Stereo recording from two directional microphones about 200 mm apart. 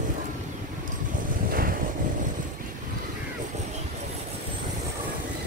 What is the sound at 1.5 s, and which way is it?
Vehicle, 45° right (ahead or behind).